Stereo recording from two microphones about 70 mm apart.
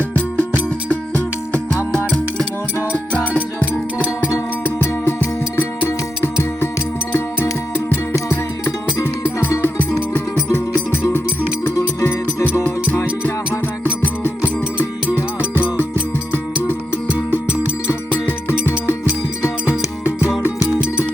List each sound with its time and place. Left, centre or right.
0.0 s music: left
1.7 s music: centre
4.6 s music: left
8.3 s music: left
9.6 s music: left
12.6 s music: left
17.8 s music: left